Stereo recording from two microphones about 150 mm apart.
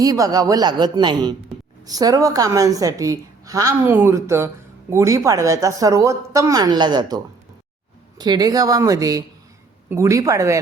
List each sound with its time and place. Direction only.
0.0 s a woman's voice: 25° right (ahead or behind)
8.2 s a woman's voice: 25° right (ahead or behind)